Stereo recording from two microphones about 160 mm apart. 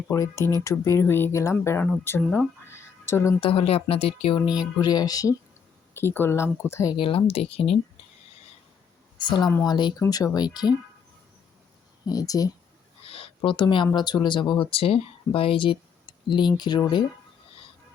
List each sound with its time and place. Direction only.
0.1 s speech: 20° left (ahead or behind)
3.4 s speech: 35° left (ahead or behind)
4.8 s speech: 25° left (ahead or behind)
6.9 s speech: 30° left (ahead or behind)
9.1 s a woman's voice: 30° left (ahead or behind)
12.0 s speech: 20° left (ahead or behind)
13.1 s speech: 35° left (ahead or behind)